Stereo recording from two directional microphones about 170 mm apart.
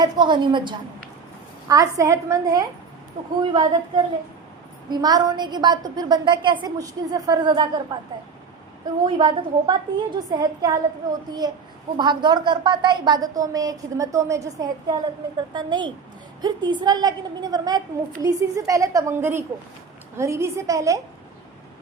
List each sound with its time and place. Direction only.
0.0 s a woman's voice: 25° right (ahead or behind)
9.0 s a woman's voice: 30° right (ahead or behind)